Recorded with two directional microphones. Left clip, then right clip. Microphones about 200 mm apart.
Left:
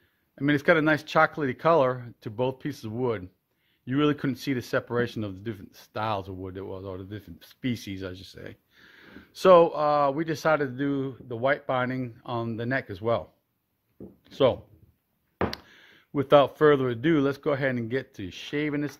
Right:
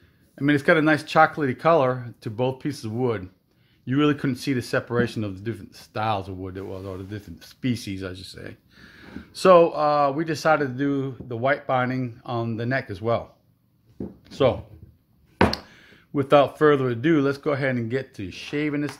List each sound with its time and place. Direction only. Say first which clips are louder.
0.4 s speech: right 3 dB; 45° left (ahead or behind)
14.2 s speech: right 2 dB; 45° left (ahead or behind)